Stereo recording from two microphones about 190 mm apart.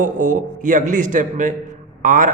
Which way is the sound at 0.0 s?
45° right (ahead or behind).